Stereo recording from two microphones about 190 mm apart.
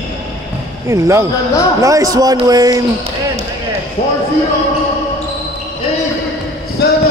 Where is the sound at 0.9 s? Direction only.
15° right (ahead or behind).